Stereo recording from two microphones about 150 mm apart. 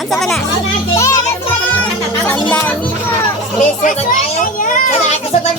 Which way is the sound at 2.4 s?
10° left (ahead or behind).